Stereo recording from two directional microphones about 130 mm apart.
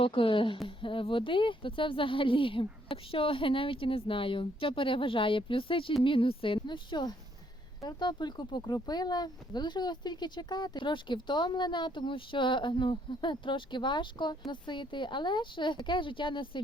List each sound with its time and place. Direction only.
0.0 s a woman's voice: 45° left (ahead or behind)